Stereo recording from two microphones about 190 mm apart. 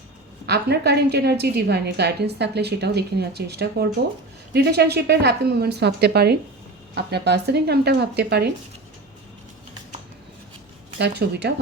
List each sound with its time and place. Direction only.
0.4 s a woman's voice: 60° right (ahead or behind)
10.9 s a woman's voice: 60° right (ahead or behind)